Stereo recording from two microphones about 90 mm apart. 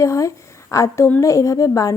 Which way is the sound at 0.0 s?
35° left (ahead or behind).